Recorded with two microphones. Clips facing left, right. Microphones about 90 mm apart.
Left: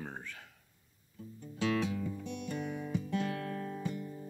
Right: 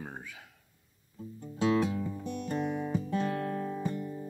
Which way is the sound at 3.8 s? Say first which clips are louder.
Right 4 dB; 45° right (ahead or behind).